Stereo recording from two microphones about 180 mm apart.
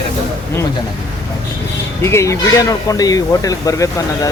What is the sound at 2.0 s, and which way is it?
Speech, 15° left (ahead or behind).